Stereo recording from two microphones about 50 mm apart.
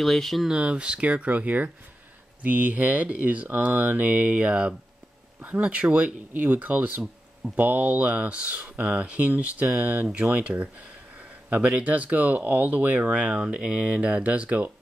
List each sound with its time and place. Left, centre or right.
0.0 s speech: centre
0.5 s speech: right
3.6 s speech: right